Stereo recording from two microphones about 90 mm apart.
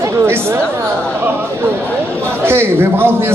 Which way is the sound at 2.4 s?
25° right (ahead or behind).